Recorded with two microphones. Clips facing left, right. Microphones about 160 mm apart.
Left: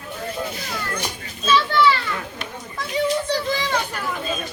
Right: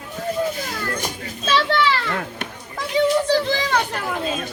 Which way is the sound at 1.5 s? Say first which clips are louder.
Left 1 dB; 80° right.